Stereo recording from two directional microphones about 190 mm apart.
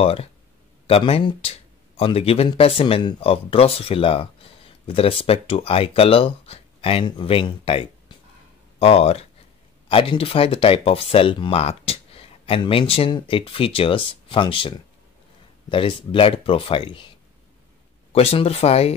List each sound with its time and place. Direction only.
0.0 s speech: 30° left (ahead or behind)
18.1 s speech: 30° left (ahead or behind)